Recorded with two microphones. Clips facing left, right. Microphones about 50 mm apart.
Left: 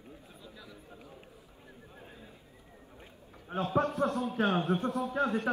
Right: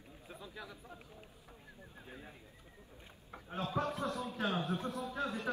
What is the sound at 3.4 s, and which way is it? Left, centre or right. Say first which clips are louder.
A man's voice: left 7 dB; left.